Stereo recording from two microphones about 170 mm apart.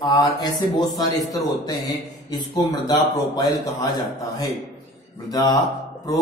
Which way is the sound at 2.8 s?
25° left (ahead or behind).